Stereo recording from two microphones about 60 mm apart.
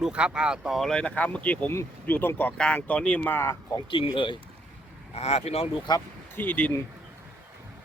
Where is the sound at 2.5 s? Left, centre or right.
Centre.